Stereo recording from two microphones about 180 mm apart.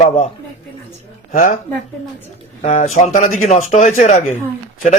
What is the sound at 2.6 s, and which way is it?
A man's voice, 45° left (ahead or behind).